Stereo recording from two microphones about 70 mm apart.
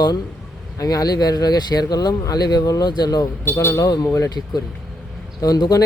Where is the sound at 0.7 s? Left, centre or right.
Left.